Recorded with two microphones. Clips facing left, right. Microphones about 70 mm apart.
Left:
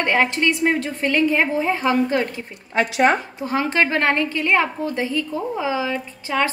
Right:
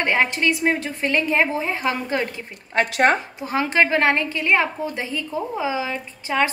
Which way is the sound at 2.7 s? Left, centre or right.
Right.